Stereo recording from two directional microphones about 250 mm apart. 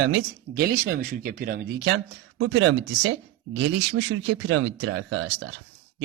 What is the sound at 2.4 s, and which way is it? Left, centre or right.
Speech, right.